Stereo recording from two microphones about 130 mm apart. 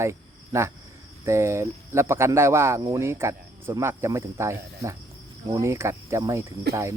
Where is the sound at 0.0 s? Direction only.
20° right (ahead or behind).